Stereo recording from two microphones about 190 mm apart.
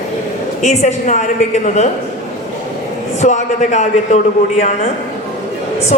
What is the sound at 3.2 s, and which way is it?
A woman's voice, 40° left (ahead or behind).